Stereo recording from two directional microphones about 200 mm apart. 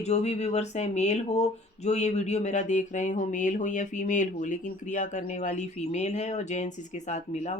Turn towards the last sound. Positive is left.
turn(degrees=35)  # may be behind; listen again after turning